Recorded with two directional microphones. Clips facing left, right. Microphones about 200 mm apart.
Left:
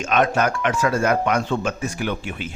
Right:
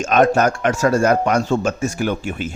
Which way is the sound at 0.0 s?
45° right (ahead or behind).